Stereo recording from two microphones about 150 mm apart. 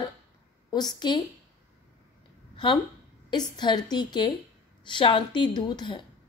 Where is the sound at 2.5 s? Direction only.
35° left (ahead or behind).